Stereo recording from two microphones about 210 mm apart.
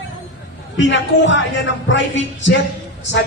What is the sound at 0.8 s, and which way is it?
Speech, 60° left (ahead or behind).